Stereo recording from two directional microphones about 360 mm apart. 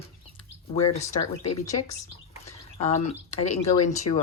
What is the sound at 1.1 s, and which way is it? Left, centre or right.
Speech, left.